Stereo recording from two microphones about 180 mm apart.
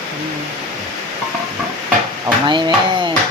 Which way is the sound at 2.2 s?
25° right (ahead or behind).